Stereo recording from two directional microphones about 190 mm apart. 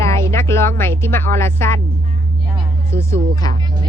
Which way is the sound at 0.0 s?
15° left (ahead or behind).